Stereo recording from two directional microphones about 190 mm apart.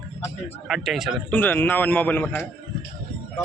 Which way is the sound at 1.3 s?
10° left (ahead or behind).